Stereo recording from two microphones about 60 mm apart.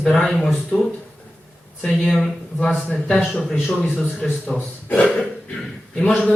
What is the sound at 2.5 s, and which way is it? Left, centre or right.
A man's voice, centre.